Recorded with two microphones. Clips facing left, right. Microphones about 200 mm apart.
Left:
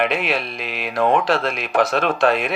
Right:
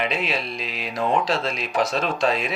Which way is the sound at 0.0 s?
60° left (ahead or behind).